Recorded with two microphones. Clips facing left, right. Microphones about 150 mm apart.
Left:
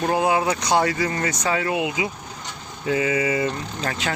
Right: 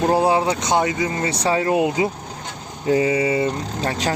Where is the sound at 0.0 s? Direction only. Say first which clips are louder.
Right 3 dB; 35° right (ahead or behind).